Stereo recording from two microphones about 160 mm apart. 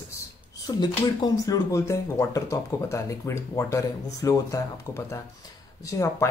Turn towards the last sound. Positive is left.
turn(degrees=20)  # may be behind; listen again after turning